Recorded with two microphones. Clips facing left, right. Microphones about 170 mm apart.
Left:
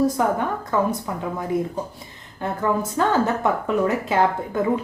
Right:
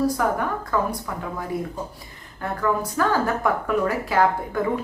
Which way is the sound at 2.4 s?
25° left (ahead or behind).